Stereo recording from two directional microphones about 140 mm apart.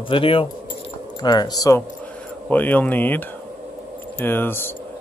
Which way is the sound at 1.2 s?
30° left (ahead or behind).